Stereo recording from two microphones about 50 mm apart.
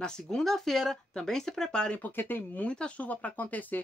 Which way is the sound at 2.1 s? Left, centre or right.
Left.